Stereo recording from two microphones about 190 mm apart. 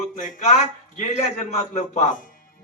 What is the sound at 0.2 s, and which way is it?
A man's voice, 40° left (ahead or behind).